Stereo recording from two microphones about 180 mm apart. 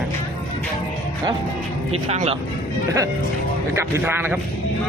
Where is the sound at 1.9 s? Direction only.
35° right (ahead or behind).